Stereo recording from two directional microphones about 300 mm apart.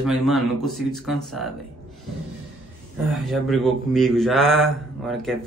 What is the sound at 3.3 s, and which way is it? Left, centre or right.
A man's voice, centre.